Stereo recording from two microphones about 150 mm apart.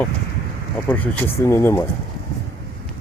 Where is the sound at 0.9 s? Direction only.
10° left (ahead or behind).